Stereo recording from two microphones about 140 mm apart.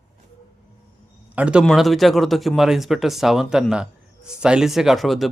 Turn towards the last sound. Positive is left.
turn(degrees=0)  # may be behind; listen again after turning